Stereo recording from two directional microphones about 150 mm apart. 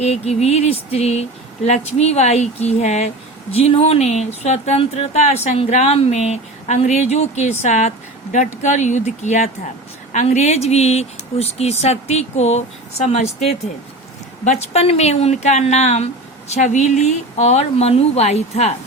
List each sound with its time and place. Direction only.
0.0 s speech: 45° left (ahead or behind)
14.4 s speech: 50° left (ahead or behind)